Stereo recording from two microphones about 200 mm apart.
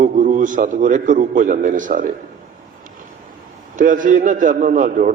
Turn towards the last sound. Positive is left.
turn(degrees=-40)  # may be behind; listen again after turning